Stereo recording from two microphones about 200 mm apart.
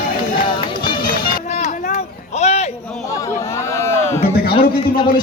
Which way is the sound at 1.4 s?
35° left (ahead or behind).